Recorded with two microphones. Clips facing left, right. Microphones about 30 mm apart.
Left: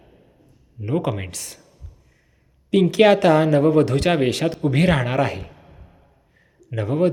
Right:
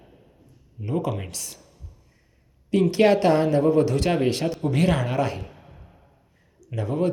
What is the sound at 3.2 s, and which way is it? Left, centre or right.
A man's voice, left.